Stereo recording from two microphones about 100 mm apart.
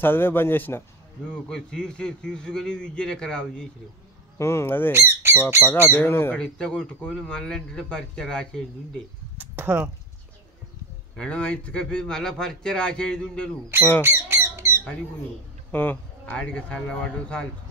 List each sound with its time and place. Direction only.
0.0 s speech: 20° left (ahead or behind)
1.3 s speech: 5° left (ahead or behind)
4.4 s speech: 25° left (ahead or behind)
4.9 s speech: 25° right (ahead or behind)
5.7 s speech: 20° left (ahead or behind)
6.3 s speech: 10° left (ahead or behind)
9.4 s speech: 15° right (ahead or behind)
11.1 s speech: 10° left (ahead or behind)
14.0 s squawk: 25° right (ahead or behind)
15.7 s speech: 20° left (ahead or behind)